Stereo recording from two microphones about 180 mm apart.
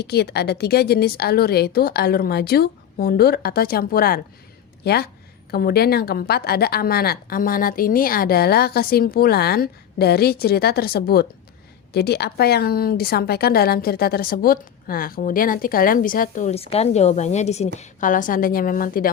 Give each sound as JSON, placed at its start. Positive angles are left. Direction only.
{"t": 0.0, "sound": "a woman's voice", "side_deg": 65}